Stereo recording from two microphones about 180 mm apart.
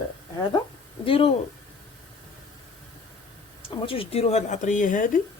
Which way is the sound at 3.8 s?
30° left (ahead or behind).